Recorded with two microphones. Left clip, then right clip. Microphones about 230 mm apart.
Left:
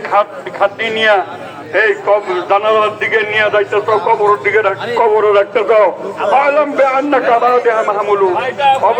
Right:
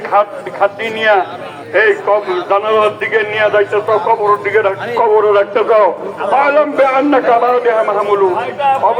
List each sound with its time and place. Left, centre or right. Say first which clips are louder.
0.1 s a man's voice: right 1 dB; left